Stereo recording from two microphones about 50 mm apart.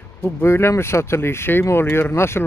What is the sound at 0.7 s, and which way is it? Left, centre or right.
Speech, left.